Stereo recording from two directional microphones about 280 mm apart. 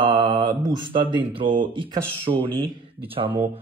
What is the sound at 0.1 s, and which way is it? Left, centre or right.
A man's voice, centre.